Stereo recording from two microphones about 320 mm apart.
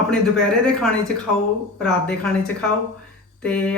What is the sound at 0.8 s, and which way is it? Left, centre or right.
Speech, centre.